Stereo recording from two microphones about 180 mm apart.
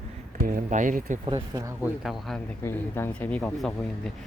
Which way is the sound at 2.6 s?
15° left (ahead or behind).